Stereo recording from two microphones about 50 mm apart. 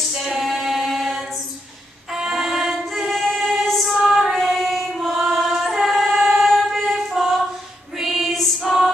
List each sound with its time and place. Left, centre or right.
0.1 s female singing: centre
2.1 s music: centre
5.3 s singing: centre
8.0 s music: centre